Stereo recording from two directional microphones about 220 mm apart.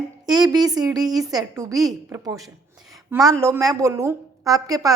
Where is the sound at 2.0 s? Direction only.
15° right (ahead or behind).